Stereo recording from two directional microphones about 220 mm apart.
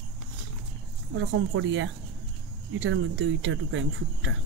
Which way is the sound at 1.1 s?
60° right (ahead or behind).